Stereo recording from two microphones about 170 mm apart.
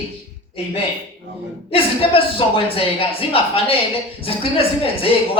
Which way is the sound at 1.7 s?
30° left (ahead or behind).